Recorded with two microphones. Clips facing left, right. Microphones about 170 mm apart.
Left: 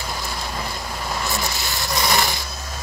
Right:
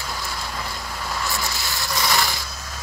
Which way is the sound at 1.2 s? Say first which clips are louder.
Left 2 dB; 20° left (ahead or behind).